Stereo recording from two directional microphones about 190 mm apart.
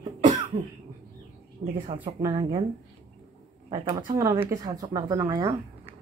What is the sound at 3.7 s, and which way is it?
Speech, 25° right (ahead or behind).